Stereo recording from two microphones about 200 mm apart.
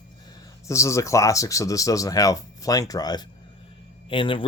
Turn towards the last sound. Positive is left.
turn(degrees=25)  # may be behind; listen again after turning